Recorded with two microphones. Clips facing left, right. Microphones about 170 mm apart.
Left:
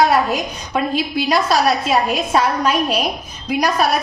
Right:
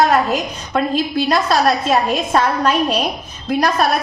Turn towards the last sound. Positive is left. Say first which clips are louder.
# right 1 dB
turn(degrees=10)  # may be behind; listen again after turning